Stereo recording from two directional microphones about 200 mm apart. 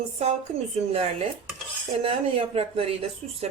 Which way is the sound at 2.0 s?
30° right (ahead or behind).